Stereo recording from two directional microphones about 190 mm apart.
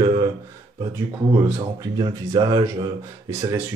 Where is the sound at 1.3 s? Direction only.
20° right (ahead or behind).